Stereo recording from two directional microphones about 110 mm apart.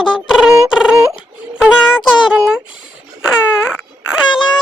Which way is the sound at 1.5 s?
5° right (ahead or behind).